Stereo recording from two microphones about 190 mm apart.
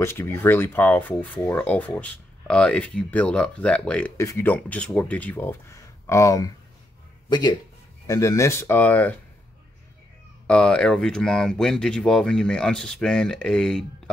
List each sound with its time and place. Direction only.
0.0 s speech: 15° left (ahead or behind)
10.4 s speech: 5° left (ahead or behind)